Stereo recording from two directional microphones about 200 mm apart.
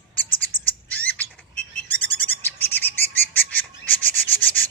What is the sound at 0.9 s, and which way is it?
Bird, 5° left (ahead or behind).